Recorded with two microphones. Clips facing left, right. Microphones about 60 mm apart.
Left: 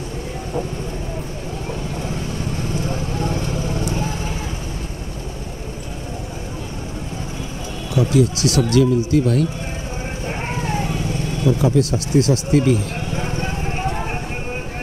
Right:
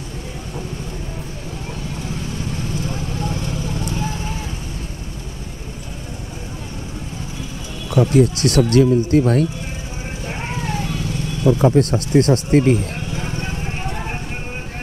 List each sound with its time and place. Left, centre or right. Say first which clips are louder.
2.7 s vehicle: left 2 dB; left
7.9 s speech: right 2 dB; right
10.2 s vehicle: left 1 dB; left
11.4 s speech: right 3 dB; right
13.1 s vehicle: left 2 dB; centre